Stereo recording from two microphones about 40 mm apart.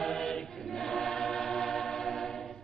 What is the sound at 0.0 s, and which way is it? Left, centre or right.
Choir, centre.